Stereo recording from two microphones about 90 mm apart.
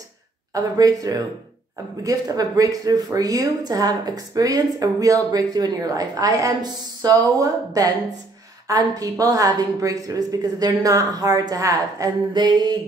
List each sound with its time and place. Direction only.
0.6 s a woman's voice: 45° right (ahead or behind)